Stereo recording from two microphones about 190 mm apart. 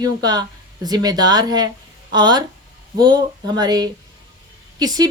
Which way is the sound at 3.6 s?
20° right (ahead or behind).